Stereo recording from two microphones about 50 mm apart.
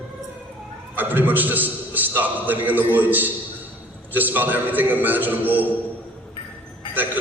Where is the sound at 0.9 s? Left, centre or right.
Right.